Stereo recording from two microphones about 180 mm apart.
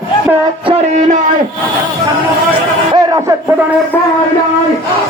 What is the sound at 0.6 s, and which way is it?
Speech, 35° right (ahead or behind).